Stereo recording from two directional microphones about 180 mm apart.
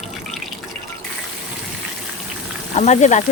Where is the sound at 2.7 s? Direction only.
40° left (ahead or behind).